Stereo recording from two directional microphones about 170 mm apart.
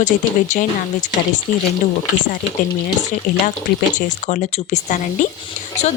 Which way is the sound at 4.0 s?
45° left (ahead or behind).